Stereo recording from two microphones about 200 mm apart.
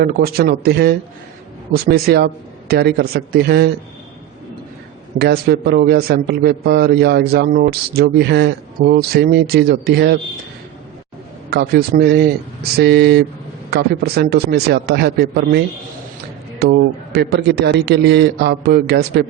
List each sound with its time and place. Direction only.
0.0 s a man's voice: 50° right (ahead or behind)
5.1 s a man's voice: 55° right (ahead or behind)
11.5 s a man's voice: 55° right (ahead or behind)